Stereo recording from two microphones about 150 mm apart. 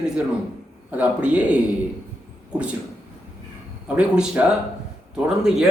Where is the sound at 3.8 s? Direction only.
10° right (ahead or behind).